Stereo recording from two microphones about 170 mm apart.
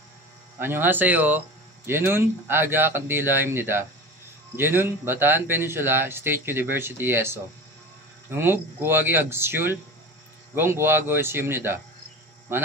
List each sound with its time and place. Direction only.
0.6 s speech: 10° right (ahead or behind)